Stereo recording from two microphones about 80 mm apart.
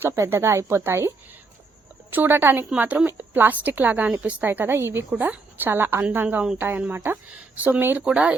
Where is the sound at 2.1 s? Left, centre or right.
Right.